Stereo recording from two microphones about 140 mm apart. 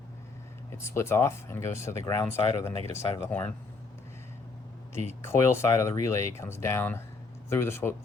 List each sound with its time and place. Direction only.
0.7 s speech: 20° left (ahead or behind)
5.2 s speech: 15° left (ahead or behind)